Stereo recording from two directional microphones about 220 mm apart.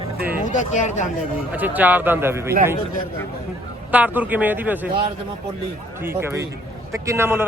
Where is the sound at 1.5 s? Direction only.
10° right (ahead or behind).